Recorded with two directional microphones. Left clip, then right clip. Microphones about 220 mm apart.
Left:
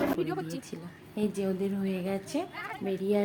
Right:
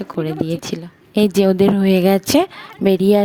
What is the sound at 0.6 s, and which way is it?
A woman's voice, 45° right (ahead or behind).